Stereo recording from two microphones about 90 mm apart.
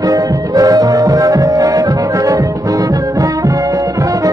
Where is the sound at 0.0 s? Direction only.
40° right (ahead or behind).